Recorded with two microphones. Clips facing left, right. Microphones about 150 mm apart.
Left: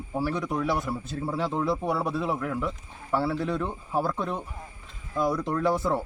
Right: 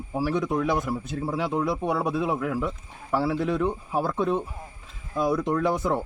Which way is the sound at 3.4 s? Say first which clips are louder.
Right 4 dB; 20° right (ahead or behind).